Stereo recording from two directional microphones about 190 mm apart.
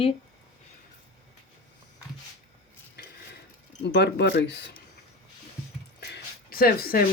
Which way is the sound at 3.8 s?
65° left (ahead or behind).